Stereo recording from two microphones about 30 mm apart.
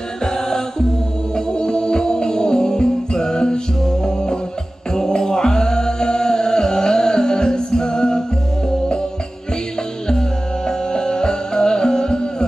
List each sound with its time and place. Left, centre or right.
0.2 s music: left
4.9 s chant: centre
10.7 s music: left